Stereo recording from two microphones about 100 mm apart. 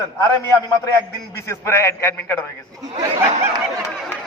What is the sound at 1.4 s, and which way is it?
A man's voice, 30° left (ahead or behind).